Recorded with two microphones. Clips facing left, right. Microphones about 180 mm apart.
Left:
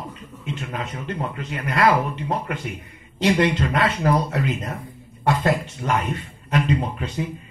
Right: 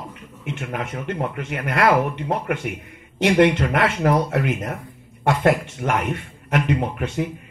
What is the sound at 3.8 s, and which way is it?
A man's voice, 75° right (ahead or behind).